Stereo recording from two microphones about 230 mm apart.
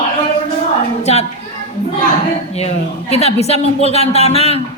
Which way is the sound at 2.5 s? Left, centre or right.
Left.